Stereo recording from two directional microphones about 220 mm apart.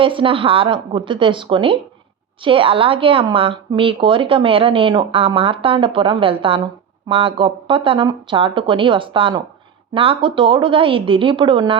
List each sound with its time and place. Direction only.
0.0 s speech: 25° right (ahead or behind)